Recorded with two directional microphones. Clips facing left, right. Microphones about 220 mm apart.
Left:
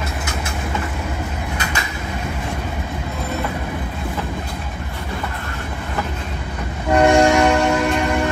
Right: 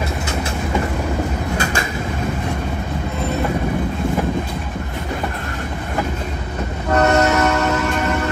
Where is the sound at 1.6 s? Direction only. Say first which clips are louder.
Right 4 dB; 45° right (ahead or behind).